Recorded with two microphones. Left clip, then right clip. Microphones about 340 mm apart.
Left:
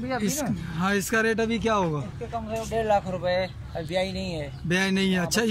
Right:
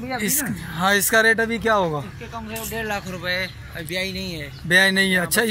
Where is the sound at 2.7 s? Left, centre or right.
Left.